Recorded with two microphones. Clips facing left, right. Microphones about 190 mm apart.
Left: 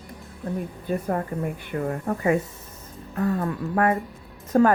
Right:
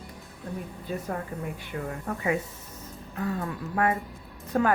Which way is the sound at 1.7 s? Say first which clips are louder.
Left 7 dB; 45° left (ahead or behind).